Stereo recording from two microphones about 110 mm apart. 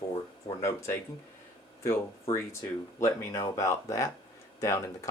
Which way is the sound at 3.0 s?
30° left (ahead or behind).